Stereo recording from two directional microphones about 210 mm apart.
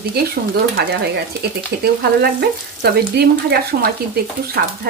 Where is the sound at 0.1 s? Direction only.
45° right (ahead or behind).